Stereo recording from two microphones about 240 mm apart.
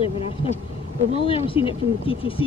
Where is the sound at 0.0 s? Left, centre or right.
Left.